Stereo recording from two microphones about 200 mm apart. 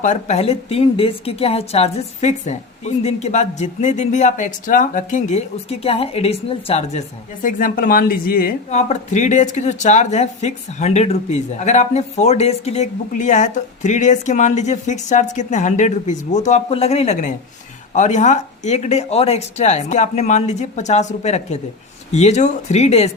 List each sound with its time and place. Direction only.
0.0 s speech: 35° left (ahead or behind)
7.4 s speech: 45° left (ahead or behind)
8.7 s speech: 35° left (ahead or behind)